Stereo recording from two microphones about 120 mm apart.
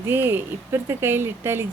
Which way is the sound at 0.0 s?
20° right (ahead or behind).